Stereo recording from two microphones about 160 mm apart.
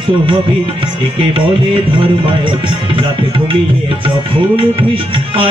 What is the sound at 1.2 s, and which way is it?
Music, 30° right (ahead or behind).